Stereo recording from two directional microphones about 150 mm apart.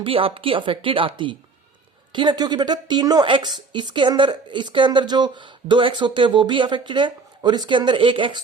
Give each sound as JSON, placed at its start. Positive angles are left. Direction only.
{"t": 0.0, "sound": "speech", "side_deg": -35}